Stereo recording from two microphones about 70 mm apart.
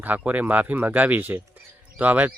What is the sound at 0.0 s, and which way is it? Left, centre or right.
Speech, right.